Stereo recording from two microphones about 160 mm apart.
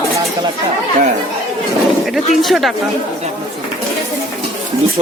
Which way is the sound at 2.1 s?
Centre (ahead or behind).